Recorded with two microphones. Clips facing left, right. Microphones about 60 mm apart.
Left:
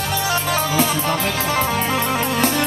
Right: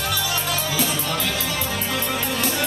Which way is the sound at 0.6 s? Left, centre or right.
Left.